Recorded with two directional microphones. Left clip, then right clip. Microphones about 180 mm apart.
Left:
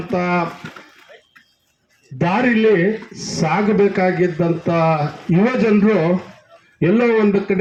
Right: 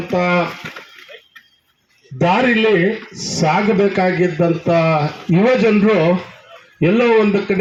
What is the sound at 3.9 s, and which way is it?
A man's voice, 35° right (ahead or behind).